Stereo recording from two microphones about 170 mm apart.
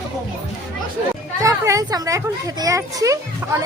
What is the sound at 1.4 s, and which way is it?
Speech, 20° right (ahead or behind).